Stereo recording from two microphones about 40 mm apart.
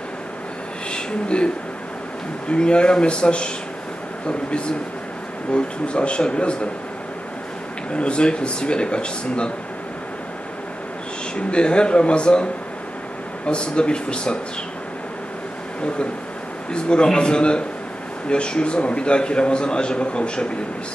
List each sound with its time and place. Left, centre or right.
0.9 s speech: left
2.5 s a man's voice: left
7.9 s a man's voice: left
11.3 s a man's voice: left
13.5 s a man's voice: left
16.7 s a man's voice: left